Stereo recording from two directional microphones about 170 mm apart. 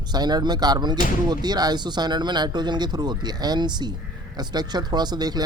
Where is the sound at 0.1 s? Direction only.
25° right (ahead or behind).